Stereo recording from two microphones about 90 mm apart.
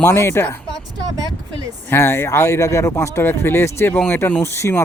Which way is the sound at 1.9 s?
25° left (ahead or behind).